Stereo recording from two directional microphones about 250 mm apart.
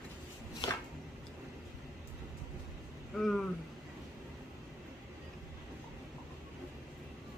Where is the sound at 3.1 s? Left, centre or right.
Centre.